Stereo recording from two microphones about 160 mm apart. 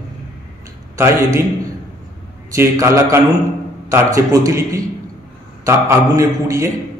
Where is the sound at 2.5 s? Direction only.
20° right (ahead or behind).